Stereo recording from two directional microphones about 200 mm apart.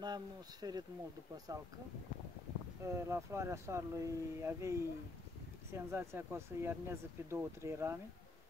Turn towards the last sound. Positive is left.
turn(degrees=-15)  # may be behind; listen again after turning